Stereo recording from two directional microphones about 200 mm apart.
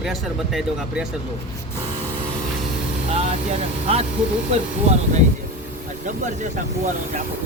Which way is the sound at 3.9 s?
30° right (ahead or behind).